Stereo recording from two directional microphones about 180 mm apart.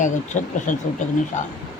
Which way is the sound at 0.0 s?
45° left (ahead or behind).